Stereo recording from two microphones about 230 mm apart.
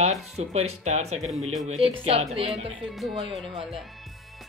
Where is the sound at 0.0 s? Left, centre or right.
Right.